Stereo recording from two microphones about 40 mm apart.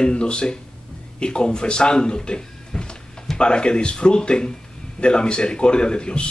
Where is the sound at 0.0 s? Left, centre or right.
Left.